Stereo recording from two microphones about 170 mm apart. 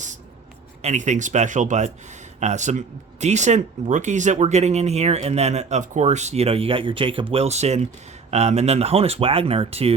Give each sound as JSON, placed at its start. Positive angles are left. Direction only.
{"t": 0.8, "sound": "speech", "side_deg": -45}